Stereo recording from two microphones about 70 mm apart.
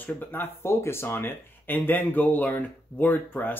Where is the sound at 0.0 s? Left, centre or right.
Left.